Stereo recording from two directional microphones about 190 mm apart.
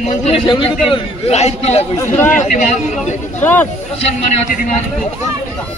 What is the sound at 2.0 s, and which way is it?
Speech, 15° left (ahead or behind).